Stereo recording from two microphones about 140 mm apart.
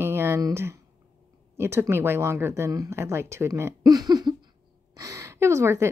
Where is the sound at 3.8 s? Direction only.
30° right (ahead or behind).